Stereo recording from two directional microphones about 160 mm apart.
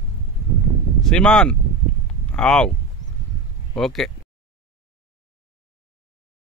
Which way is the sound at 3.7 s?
Centre (ahead or behind).